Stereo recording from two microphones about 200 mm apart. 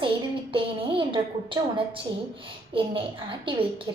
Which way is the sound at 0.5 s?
25° right (ahead or behind).